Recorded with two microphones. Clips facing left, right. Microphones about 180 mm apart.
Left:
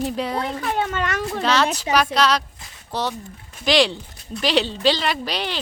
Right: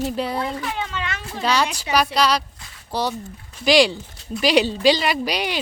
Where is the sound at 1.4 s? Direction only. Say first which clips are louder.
Even; 10° right (ahead or behind).